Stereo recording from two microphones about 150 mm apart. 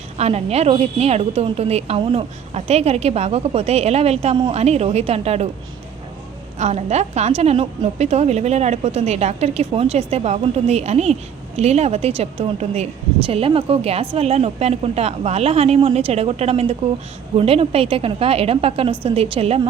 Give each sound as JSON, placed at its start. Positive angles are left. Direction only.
{"t": 0.2, "sound": "a woman's voice", "side_deg": -45}
{"t": 6.6, "sound": "a woman's voice", "side_deg": -50}